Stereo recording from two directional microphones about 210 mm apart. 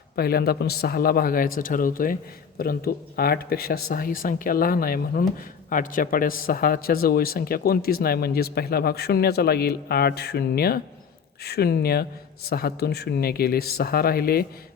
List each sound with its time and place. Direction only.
0.2 s a man's voice: 45° left (ahead or behind)